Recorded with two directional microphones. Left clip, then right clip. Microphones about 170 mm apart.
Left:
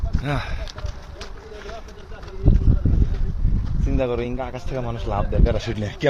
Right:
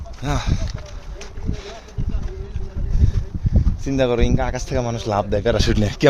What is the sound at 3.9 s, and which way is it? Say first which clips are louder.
Speech: right 5 dB; 75° right (ahead or behind).